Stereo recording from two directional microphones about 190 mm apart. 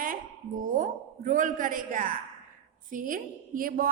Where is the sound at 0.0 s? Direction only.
45° right (ahead or behind).